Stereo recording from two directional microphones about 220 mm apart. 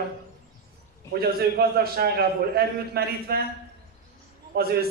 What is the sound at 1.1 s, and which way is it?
A man's voice, 45° right (ahead or behind).